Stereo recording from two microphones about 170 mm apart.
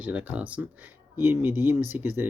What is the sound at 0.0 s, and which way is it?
Speech, 10° right (ahead or behind).